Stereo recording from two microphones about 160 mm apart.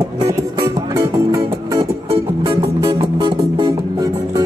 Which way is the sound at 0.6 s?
20° right (ahead or behind).